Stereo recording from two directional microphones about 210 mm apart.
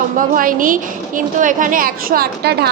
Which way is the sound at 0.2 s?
40° right (ahead or behind).